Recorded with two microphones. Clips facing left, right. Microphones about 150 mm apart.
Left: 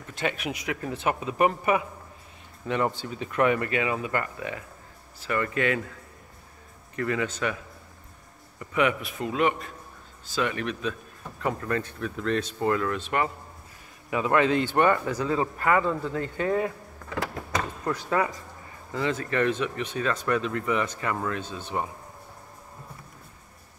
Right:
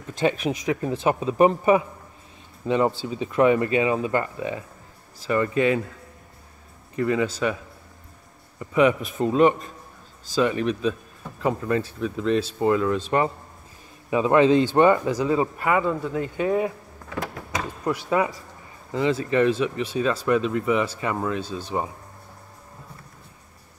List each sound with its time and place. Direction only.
0.2 s speech: 25° right (ahead or behind)
7.0 s speech: 20° right (ahead or behind)
8.5 s speech: 30° right (ahead or behind)
17.8 s speech: 15° right (ahead or behind)
21.5 s speech: 35° right (ahead or behind)